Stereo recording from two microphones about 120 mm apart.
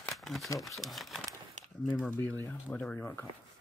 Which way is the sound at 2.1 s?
15° left (ahead or behind).